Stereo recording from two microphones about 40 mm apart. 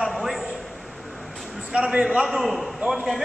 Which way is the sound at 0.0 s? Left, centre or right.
Centre.